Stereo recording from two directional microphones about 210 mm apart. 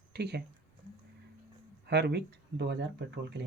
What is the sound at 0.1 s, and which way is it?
Speech, 50° right (ahead or behind).